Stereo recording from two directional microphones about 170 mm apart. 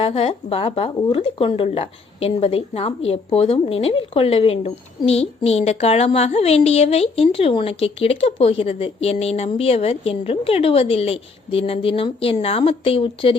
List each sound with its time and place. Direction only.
0.0 s a woman's voice: 35° left (ahead or behind)